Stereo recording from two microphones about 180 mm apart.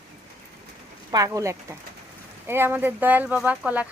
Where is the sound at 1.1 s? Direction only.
20° right (ahead or behind).